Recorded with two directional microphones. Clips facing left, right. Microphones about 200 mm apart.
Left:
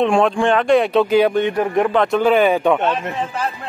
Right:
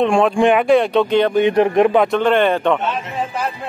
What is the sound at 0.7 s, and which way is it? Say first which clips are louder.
Speech: even; centre (ahead or behind).